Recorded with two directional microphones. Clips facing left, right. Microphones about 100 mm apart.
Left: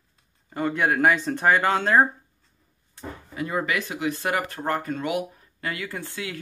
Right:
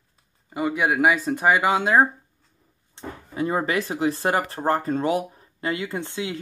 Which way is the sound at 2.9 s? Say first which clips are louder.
Right 4 dB; 30° right (ahead or behind).